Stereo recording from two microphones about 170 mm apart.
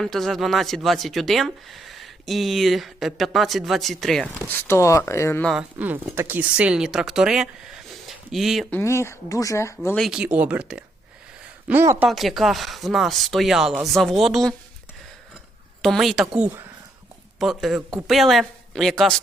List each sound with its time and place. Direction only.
0.0 s speech: centre (ahead or behind)
5.5 s speech: 5° right (ahead or behind)
8.7 s speech: 15° left (ahead or behind)
10.0 s speech: 5° right (ahead or behind)
12.0 s speech: centre (ahead or behind)
15.8 s speech: centre (ahead or behind)